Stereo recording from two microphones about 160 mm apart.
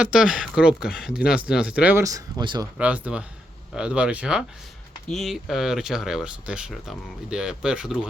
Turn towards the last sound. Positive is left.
turn(degrees=-5)  # may be behind; listen again after turning